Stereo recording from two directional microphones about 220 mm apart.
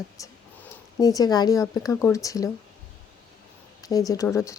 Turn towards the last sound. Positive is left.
turn(degrees=15)  # may be behind; listen again after turning